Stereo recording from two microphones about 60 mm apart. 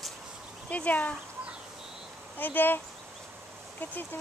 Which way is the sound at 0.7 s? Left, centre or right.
Left.